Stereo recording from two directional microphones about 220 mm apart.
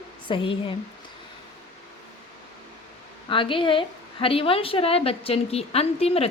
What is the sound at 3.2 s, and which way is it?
A woman's voice, 20° left (ahead or behind).